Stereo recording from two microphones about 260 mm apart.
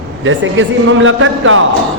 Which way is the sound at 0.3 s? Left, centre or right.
Right.